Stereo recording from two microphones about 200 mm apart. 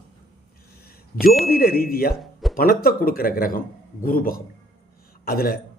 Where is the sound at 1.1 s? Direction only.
50° left (ahead or behind).